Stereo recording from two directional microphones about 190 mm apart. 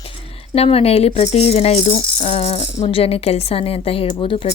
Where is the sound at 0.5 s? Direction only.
30° left (ahead or behind).